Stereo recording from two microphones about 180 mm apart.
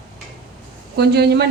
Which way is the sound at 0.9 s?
65° right (ahead or behind).